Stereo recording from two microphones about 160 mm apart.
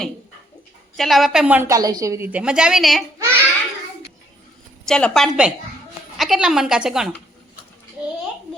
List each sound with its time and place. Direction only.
0.9 s a woman's voice: centre (ahead or behind)
1.6 s a woman's voice: 20° right (ahead or behind); by 3.0 s centre (ahead or behind)
3.2 s a sound: 15° right (ahead or behind)
4.9 s a woman's voice: 5° left (ahead or behind)